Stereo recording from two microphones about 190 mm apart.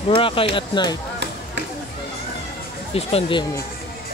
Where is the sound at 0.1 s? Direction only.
30° left (ahead or behind).